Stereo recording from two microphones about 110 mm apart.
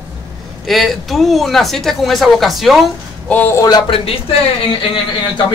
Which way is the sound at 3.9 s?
60° left (ahead or behind).